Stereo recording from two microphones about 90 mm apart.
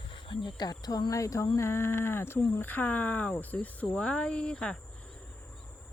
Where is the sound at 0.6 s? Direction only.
45° left (ahead or behind).